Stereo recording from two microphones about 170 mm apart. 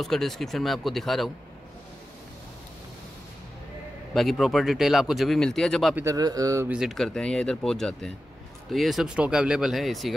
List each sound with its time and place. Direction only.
0.0 s speech: centre (ahead or behind)
4.1 s speech: centre (ahead or behind)
5.9 s a man's voice: 20° right (ahead or behind)
6.7 s speech: centre (ahead or behind)